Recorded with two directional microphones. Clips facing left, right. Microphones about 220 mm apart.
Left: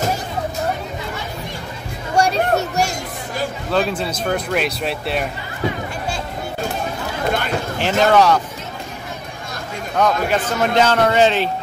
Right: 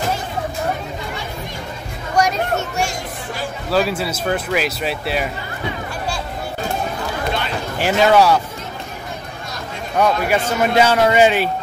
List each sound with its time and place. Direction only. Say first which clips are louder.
2.1 s chatter: left 2 dB; 30° left (ahead or behind)
3.7 s speech: right 2 dB; 5° right (ahead or behind)
7.8 s speech: right 1 dB; 10° right (ahead or behind)
9.9 s speech: right 1 dB; 10° right (ahead or behind)